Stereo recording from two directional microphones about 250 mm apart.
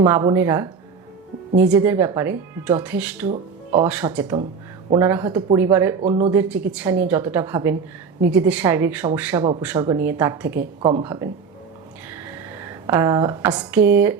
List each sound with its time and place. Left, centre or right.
0.0 s speech: centre
10.8 s speech: centre